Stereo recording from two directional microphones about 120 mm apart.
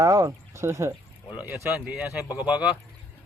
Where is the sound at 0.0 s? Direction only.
25° right (ahead or behind); by 2.6 s 10° right (ahead or behind).